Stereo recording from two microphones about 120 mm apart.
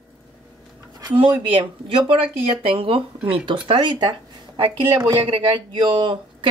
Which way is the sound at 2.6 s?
50° right (ahead or behind).